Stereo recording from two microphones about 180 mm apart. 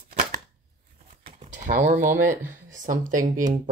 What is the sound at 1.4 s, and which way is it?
Speech, 40° right (ahead or behind).